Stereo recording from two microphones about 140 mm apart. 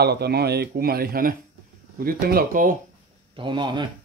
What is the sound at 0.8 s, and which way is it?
Speech, 90° right.